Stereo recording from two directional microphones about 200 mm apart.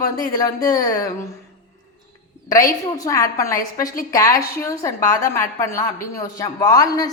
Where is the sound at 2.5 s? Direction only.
15° left (ahead or behind).